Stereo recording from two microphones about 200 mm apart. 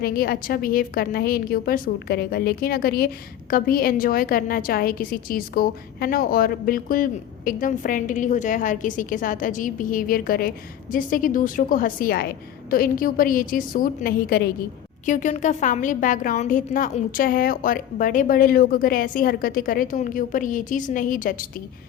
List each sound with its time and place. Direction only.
0.0 s a woman's voice: 50° left (ahead or behind)
15.0 s a woman's voice: 40° left (ahead or behind)